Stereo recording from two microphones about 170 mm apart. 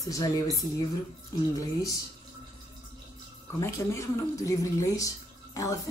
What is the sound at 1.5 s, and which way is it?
Speech, 20° left (ahead or behind).